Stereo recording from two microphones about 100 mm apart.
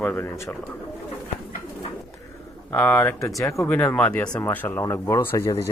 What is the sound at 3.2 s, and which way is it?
Speech, 30° left (ahead or behind).